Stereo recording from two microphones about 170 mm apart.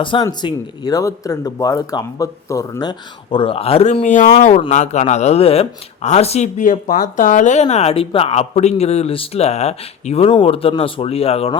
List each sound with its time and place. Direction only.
0.0 s speech: 30° left (ahead or behind)
3.2 s speech: 30° left (ahead or behind)